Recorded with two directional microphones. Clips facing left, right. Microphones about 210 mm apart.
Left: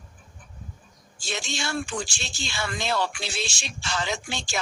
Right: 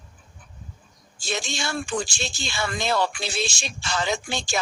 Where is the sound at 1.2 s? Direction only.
45° right (ahead or behind).